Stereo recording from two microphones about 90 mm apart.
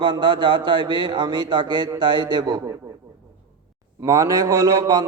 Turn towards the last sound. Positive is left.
turn(degrees=-45)  # may be behind; listen again after turning